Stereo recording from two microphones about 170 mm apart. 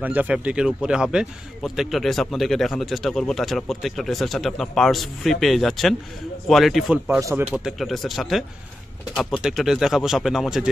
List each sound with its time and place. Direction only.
0.0 s speech: 10° right (ahead or behind)
7.2 s speech: 20° right (ahead or behind)
7.5 s speech: centre (ahead or behind)